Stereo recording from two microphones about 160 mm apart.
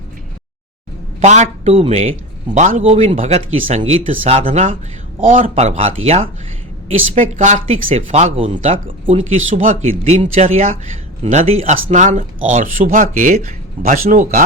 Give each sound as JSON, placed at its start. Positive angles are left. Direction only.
{"t": 1.2, "sound": "speech", "side_deg": -45}
{"t": 2.6, "sound": "speech", "side_deg": -50}